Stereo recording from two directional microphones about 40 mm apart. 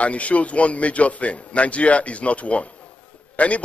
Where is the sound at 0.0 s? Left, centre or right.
Left.